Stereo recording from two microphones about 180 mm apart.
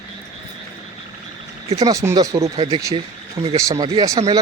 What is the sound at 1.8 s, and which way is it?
Speech, 20° right (ahead or behind).